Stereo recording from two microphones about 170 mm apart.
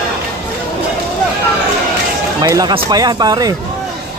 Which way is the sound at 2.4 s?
25° right (ahead or behind).